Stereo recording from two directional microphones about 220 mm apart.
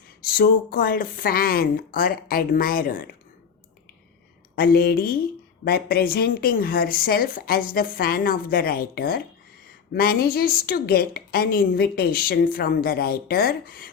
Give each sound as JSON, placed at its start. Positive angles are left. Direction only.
{"t": 0.3, "sound": "a woman's voice", "side_deg": 45}
{"t": 4.5, "sound": "a woman's voice", "side_deg": 45}